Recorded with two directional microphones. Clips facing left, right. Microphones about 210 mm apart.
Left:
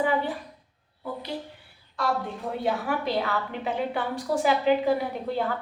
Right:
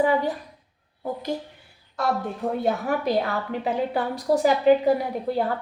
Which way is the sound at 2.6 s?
45° right (ahead or behind).